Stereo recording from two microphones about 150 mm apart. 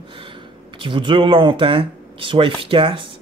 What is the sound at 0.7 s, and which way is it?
Speech, 35° right (ahead or behind).